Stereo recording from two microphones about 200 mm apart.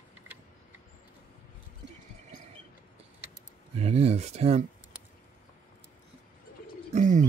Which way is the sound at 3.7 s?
30° right (ahead or behind).